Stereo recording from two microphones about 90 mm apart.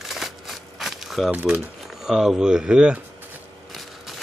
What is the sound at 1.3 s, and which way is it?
Speech, 20° right (ahead or behind).